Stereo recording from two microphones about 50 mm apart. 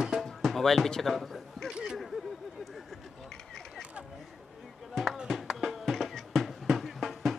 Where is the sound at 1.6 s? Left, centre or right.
Centre.